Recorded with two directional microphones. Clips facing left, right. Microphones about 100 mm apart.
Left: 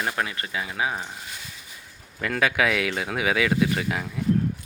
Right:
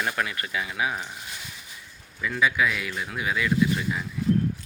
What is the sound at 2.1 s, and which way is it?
Speech, 65° left (ahead or behind).